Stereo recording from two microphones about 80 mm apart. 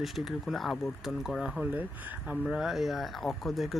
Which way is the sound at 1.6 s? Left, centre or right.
Right.